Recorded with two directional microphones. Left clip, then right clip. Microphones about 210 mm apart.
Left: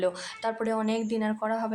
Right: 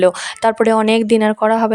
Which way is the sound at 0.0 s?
45° right (ahead or behind).